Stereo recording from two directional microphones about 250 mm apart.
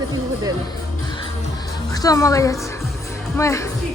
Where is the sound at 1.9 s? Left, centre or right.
Centre.